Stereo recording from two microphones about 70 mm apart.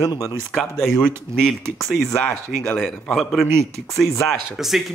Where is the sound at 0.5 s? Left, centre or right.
Centre.